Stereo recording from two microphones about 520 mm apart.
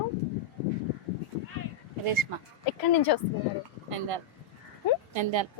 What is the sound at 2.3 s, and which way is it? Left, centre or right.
Speech, right.